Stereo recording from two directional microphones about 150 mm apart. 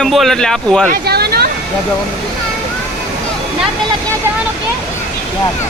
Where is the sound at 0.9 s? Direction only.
90° right.